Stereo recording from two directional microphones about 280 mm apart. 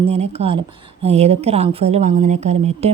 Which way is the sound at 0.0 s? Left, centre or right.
Right.